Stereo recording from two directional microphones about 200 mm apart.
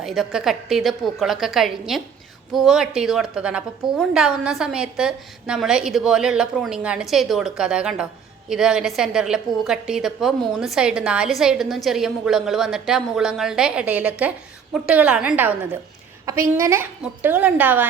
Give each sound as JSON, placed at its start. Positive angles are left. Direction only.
{"t": 0.0, "sound": "a woman's voice", "side_deg": 0}
{"t": 16.6, "sound": "a woman's voice", "side_deg": -15}